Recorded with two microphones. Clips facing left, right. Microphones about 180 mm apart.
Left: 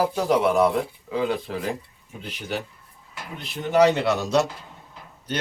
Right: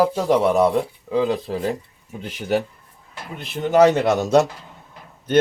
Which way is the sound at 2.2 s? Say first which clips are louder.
Right 8 dB; 45° right (ahead or behind).